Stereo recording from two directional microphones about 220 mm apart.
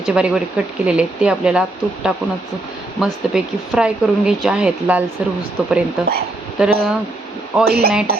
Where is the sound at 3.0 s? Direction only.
Centre (ahead or behind).